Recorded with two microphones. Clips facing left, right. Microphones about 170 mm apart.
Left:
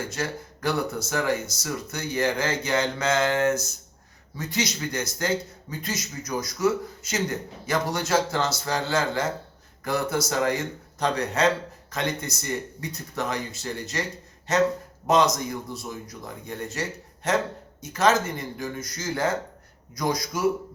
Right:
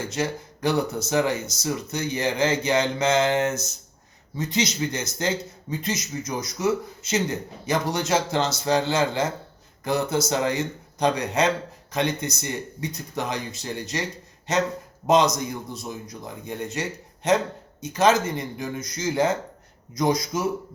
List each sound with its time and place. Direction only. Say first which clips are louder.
0.1 s a man's voice: right 3 dB; 20° right (ahead or behind)